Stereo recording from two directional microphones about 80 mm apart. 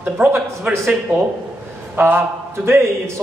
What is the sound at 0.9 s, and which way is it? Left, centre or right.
A man's voice, right.